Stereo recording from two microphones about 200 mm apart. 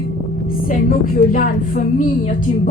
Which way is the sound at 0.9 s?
45° left (ahead or behind).